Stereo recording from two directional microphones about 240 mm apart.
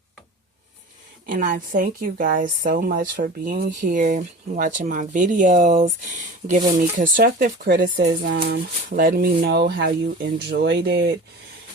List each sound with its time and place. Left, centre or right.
1.3 s speech: right